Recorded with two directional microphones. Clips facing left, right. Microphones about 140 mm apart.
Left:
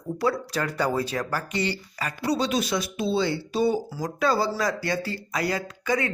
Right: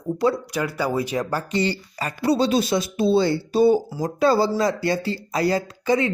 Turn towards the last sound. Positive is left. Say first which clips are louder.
# right 5 dB
turn(degrees=-25)  # may be behind; listen again after turning